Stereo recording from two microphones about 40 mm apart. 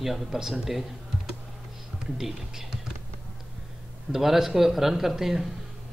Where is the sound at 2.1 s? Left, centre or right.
Centre.